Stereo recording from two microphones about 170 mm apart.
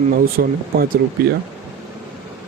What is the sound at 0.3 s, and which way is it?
Speech, 60° right (ahead or behind).